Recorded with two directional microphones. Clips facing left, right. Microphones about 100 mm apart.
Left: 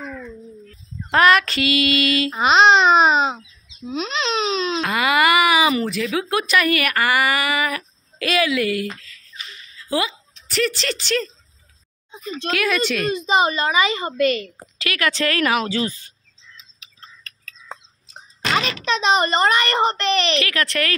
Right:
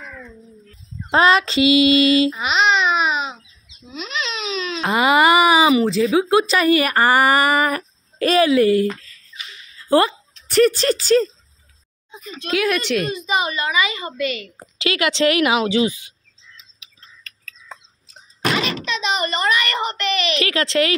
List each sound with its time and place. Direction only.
1.1 s a sound: 25° right (ahead or behind)
2.2 s a child's voice: 40° left (ahead or behind)
4.8 s a sound: 25° right (ahead or behind)
5.9 s speech: 25° right (ahead or behind)
9.8 s speech: 50° right (ahead or behind)
12.5 s a woman's voice: 15° right (ahead or behind)
13.1 s a child's voice: 30° left (ahead or behind)
14.1 s a woman's voice: 45° left (ahead or behind)
14.8 s a woman's voice: 20° right (ahead or behind)
18.9 s a child's voice: 40° left (ahead or behind)
20.3 s a sound: 25° right (ahead or behind)